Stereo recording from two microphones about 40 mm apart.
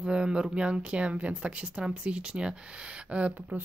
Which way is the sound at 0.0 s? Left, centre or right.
Right.